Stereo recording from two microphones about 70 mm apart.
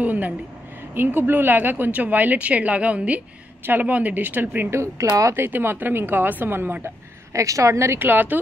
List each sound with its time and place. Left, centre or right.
0.0 s a sound: right
0.9 s speech: right
5.4 s speech: right
7.3 s speech: right